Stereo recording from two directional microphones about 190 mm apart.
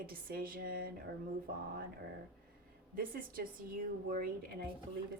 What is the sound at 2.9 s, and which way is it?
Speech, 50° right (ahead or behind).